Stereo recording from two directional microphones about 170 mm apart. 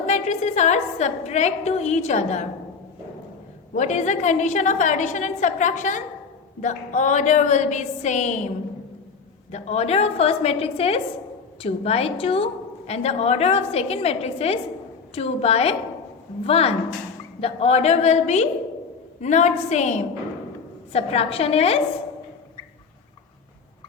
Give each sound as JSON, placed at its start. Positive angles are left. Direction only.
{"t": 0.0, "sound": "a woman's voice", "side_deg": 40}
{"t": 3.8, "sound": "a woman's voice", "side_deg": 45}